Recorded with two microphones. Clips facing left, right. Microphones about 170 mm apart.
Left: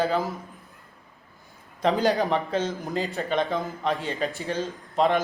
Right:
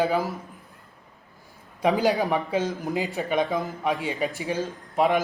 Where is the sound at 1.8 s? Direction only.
5° right (ahead or behind).